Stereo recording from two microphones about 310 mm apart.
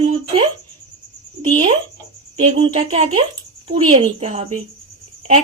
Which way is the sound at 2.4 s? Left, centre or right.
Centre.